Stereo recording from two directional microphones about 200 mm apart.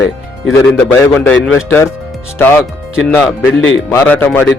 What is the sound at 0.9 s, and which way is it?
Speech, 10° left (ahead or behind).